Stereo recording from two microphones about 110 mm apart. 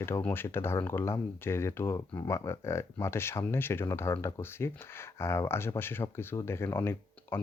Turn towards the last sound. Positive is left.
turn(degrees=20)  # may be behind; listen again after turning